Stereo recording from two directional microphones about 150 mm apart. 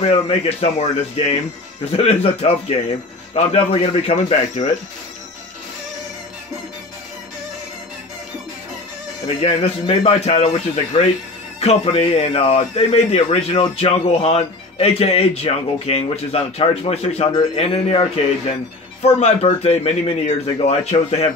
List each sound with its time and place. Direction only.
0.0 s speech: 45° left (ahead or behind)
9.4 s speech: 40° left (ahead or behind)